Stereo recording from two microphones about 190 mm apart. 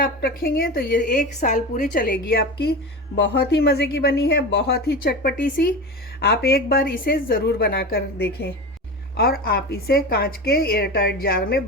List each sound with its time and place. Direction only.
0.0 s a woman's voice: 55° left (ahead or behind)